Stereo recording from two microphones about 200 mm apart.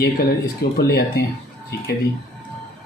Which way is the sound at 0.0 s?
50° left (ahead or behind).